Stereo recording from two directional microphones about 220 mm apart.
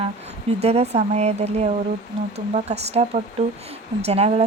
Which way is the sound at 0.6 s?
30° right (ahead or behind).